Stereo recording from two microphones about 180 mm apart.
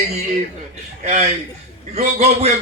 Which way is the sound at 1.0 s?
40° right (ahead or behind).